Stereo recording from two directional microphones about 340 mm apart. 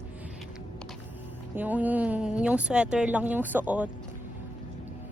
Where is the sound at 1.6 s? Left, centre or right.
Centre.